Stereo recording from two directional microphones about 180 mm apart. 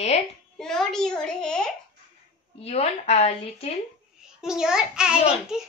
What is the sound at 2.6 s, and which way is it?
A woman's voice, 35° left (ahead or behind).